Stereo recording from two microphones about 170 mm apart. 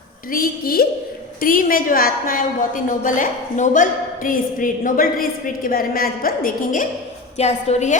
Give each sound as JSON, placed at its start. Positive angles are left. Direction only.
{"t": 0.3, "sound": "a woman's voice", "side_deg": 60}
{"t": 7.3, "sound": "a woman's voice", "side_deg": 40}